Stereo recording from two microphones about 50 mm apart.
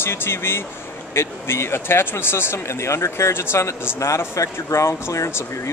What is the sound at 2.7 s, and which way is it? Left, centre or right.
Speech, left.